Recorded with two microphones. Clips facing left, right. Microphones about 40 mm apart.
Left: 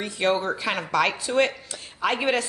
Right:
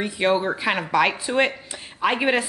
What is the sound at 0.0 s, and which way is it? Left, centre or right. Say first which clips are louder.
Speech: right 3 dB; centre.